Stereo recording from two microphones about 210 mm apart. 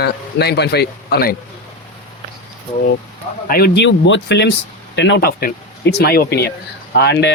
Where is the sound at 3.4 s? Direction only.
45° left (ahead or behind).